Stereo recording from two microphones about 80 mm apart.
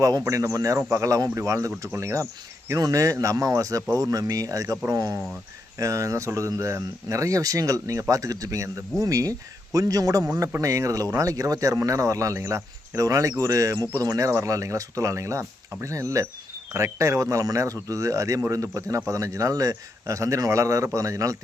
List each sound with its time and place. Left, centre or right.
0.0 s speech: right
2.7 s speech: right